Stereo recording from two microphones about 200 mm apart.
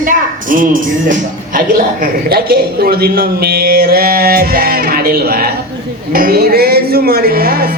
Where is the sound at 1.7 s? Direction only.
50° right (ahead or behind).